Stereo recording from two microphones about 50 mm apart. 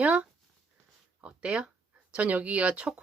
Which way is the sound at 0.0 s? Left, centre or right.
Right.